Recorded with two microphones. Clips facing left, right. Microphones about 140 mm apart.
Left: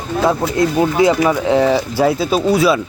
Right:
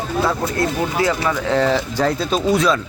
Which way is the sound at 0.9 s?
15° left (ahead or behind).